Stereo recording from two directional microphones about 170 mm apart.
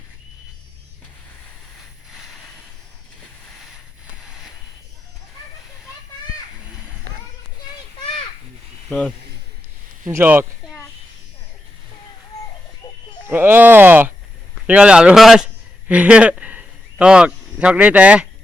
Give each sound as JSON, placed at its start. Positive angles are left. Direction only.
{"t": 8.9, "sound": "a man's voice", "side_deg": 5}
{"t": 10.1, "sound": "speech", "side_deg": -15}
{"t": 12.8, "sound": "fowl", "side_deg": 25}
{"t": 13.2, "sound": "a man's voice", "side_deg": -10}